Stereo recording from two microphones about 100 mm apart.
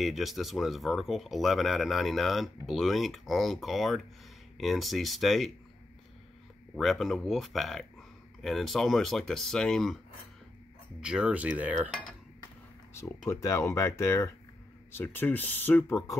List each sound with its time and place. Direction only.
0.0 s speech: centre (ahead or behind)
6.7 s speech: centre (ahead or behind)
11.0 s cutlery: 10° right (ahead or behind)
13.3 s speech: 30° left (ahead or behind)